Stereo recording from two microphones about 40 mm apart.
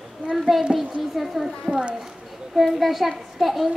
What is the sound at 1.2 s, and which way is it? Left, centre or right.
Speech, centre.